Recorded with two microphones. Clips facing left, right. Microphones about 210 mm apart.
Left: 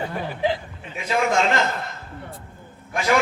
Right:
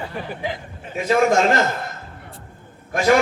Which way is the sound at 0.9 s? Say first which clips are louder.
Right 5 dB; 45° right (ahead or behind).